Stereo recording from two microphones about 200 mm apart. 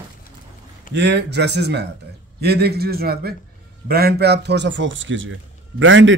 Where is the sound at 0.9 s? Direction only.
60° right (ahead or behind).